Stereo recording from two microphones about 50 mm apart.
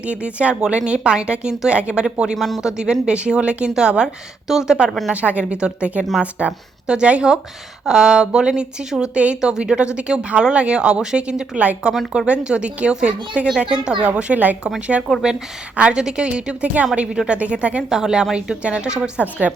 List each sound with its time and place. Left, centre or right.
0.0 s speech: right
2.3 s speech: centre
2.6 s speech: centre
5.1 s speech: right
14.2 s speech: right
17.8 s speech: centre
19.2 s a woman's voice: right